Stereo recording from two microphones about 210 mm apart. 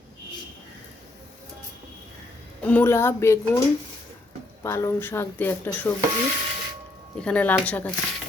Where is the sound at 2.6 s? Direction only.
10° left (ahead or behind).